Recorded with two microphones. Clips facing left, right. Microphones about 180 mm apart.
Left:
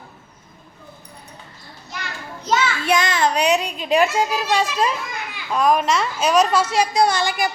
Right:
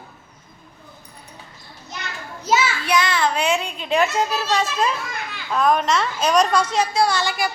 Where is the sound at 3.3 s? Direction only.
20° left (ahead or behind).